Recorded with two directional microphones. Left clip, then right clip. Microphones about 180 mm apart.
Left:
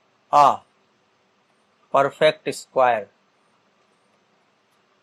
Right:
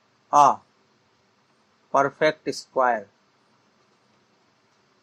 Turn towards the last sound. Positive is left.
turn(degrees=25)  # may be behind; listen again after turning